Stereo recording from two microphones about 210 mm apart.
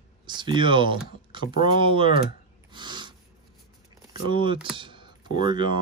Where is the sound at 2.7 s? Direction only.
20° right (ahead or behind).